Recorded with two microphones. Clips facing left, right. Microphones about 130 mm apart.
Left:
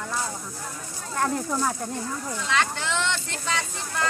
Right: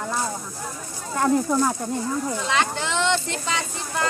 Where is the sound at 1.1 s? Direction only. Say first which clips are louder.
Right 6 dB; 10° right (ahead or behind).